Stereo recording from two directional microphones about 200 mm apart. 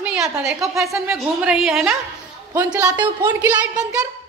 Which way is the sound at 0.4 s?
15° right (ahead or behind).